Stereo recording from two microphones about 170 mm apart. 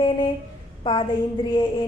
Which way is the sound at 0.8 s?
30° left (ahead or behind).